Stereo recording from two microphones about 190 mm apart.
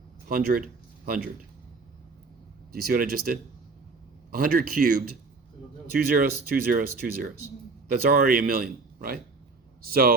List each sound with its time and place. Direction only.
0.3 s speech: 50° right (ahead or behind)
2.8 s a man's voice: 50° right (ahead or behind)
6.1 s a man's voice: 50° right (ahead or behind)